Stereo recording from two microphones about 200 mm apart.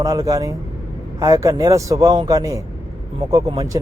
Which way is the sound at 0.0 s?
15° right (ahead or behind).